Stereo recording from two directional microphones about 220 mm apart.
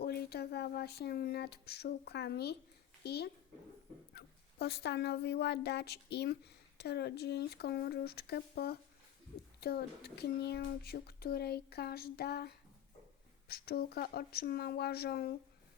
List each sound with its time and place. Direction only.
0.0 s a child's voice: 45° left (ahead or behind)